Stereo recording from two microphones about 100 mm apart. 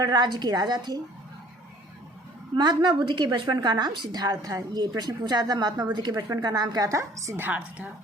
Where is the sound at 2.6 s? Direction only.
45° right (ahead or behind); by 7.4 s 30° right (ahead or behind).